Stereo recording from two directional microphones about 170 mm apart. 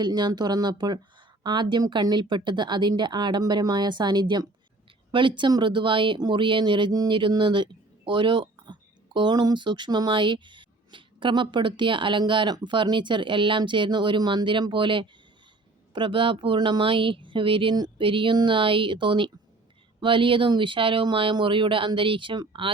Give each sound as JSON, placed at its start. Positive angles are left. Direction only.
{"t": 0.0, "sound": "speech", "side_deg": -25}